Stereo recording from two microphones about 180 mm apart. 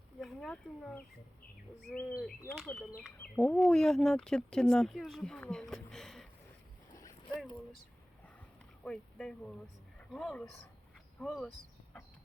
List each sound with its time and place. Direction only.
0.2 s speech: centre (ahead or behind)
6.9 s a sound: 20° left (ahead or behind)
8.8 s speech: 5° left (ahead or behind)